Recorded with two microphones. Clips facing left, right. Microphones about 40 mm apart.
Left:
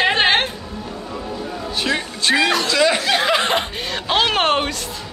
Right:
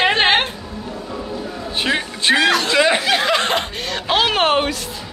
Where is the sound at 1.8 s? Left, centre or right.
Right.